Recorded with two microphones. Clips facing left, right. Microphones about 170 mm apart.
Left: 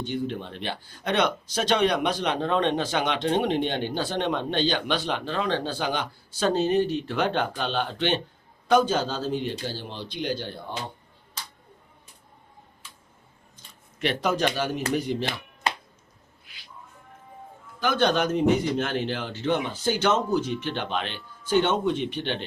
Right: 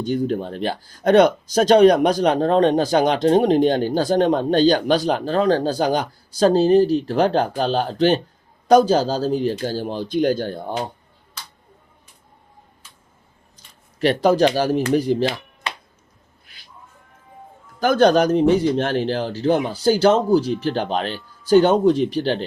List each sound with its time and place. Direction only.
0.0 s speech: 40° right (ahead or behind)
14.0 s speech: 35° right (ahead or behind)
17.7 s speech: 40° right (ahead or behind)